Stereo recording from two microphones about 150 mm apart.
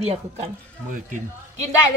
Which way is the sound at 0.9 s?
60° right (ahead or behind).